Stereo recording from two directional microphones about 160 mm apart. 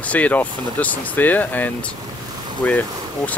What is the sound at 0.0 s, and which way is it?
Speech, 10° left (ahead or behind).